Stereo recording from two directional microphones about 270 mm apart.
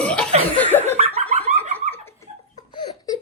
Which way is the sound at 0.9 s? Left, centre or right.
Right.